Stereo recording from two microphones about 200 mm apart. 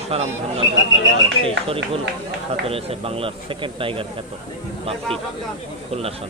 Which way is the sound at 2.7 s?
30° right (ahead or behind).